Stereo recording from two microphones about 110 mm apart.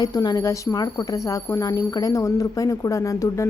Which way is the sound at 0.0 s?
35° left (ahead or behind).